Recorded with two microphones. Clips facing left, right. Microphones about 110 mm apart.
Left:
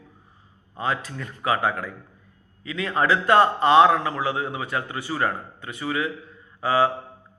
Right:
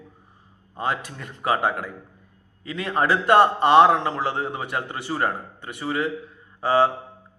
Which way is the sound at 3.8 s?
30° right (ahead or behind).